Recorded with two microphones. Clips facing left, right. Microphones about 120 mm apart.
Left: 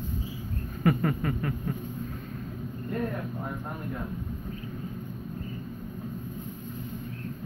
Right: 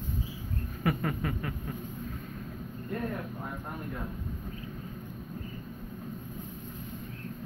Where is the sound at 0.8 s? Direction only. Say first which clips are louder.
Left 5 dB; 5° right (ahead or behind).